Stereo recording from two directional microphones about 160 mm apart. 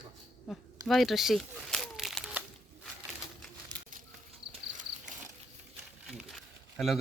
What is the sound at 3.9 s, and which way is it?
Insect, 55° right (ahead or behind).